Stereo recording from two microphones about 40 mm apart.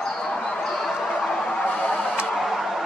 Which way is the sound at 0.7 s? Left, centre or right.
Centre.